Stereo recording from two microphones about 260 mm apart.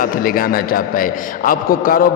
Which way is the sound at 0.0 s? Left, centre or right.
Left.